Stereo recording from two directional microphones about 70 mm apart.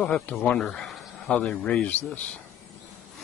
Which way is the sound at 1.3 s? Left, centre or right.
Centre.